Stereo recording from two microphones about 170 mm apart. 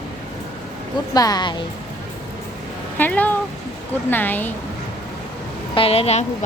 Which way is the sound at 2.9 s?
10° left (ahead or behind).